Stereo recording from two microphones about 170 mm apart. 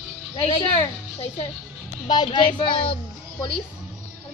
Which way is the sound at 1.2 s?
35° left (ahead or behind).